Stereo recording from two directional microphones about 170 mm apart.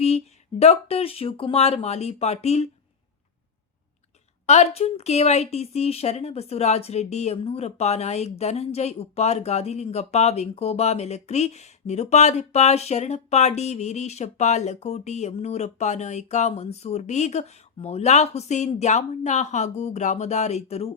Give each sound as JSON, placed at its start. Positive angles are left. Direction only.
{"t": 0.6, "sound": "a woman's voice", "side_deg": 35}
{"t": 4.4, "sound": "a woman's voice", "side_deg": 40}